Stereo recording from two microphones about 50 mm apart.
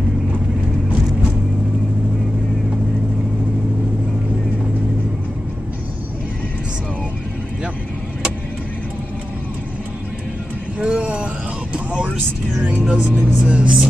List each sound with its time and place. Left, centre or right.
10.8 s a sound: right
11.7 s vehicle: right
12.5 s music: right